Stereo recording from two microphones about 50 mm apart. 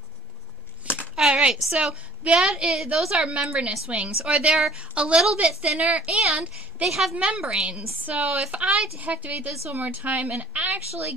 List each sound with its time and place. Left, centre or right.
1.1 s a woman's voice: centre
6.8 s a woman's voice: centre
7.2 s a woman's voice: right